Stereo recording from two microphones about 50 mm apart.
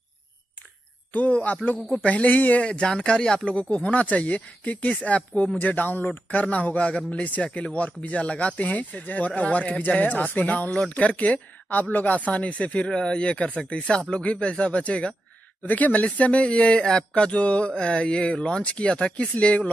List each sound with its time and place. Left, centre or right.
1.1 s speech: left
2.6 s speech: centre
12.7 s speech: centre
19.3 s speech: left